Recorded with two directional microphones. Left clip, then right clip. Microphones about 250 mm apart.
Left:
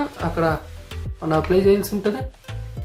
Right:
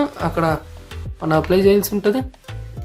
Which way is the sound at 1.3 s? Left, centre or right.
Right.